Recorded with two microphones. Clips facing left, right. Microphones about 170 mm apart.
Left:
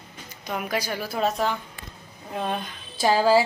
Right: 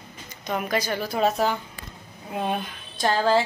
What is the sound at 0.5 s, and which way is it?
A woman's voice, 10° left (ahead or behind).